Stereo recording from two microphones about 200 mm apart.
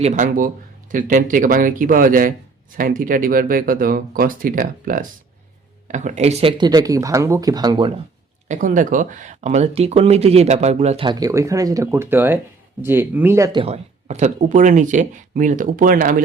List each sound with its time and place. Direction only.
0.0 s speech: 40° right (ahead or behind); by 7.9 s 20° right (ahead or behind)
8.4 s speech: 40° right (ahead or behind)